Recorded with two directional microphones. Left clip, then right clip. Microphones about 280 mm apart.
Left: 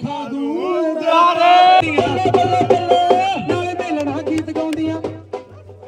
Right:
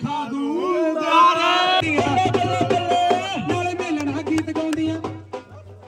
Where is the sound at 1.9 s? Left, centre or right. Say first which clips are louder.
Left 4 dB; centre.